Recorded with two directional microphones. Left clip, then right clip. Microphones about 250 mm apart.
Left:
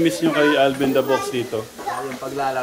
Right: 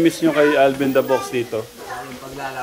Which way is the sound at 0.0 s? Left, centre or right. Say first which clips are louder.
Right 2 dB; centre.